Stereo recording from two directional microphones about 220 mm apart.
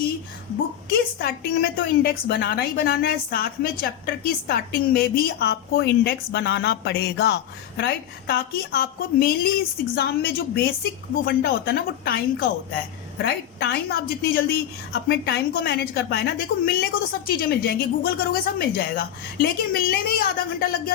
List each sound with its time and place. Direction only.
0.9 s a woman's voice: 45° left (ahead or behind)